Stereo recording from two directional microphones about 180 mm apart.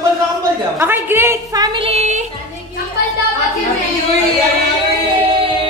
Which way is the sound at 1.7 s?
35° right (ahead or behind).